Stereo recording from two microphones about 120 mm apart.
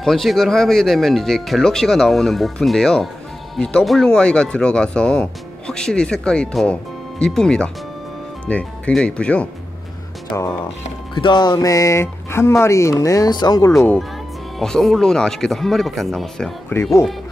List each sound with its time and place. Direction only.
0.0 s speech: centre (ahead or behind)
11.1 s speech: 40° left (ahead or behind); by 13.9 s 25° left (ahead or behind)
14.6 s speech: 5° left (ahead or behind)